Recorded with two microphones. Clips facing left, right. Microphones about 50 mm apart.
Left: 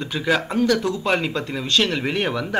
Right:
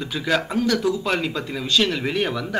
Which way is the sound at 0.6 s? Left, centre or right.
Centre.